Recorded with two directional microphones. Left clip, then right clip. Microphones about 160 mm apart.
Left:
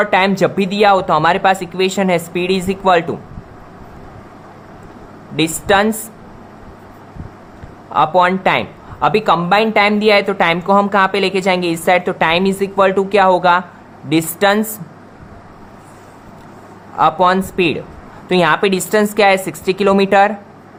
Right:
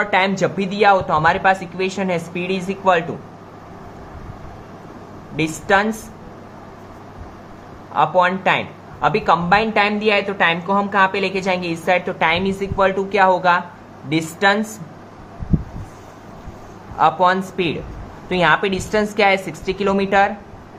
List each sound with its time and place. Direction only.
0.0 s speech: 55° left (ahead or behind)
5.4 s speech: 55° left (ahead or behind)
7.9 s speech: 60° left (ahead or behind)
17.0 s speech: 50° left (ahead or behind)